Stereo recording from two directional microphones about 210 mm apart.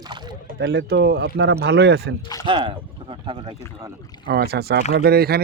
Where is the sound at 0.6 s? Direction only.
55° right (ahead or behind).